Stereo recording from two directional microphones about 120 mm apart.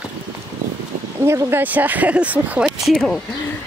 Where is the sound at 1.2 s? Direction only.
25° right (ahead or behind).